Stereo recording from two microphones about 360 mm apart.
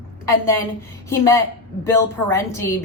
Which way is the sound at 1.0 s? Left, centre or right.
Centre.